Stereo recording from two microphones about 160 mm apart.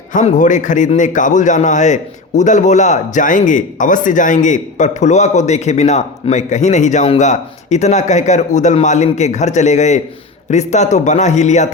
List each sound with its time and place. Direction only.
0.1 s a man's voice: 50° left (ahead or behind)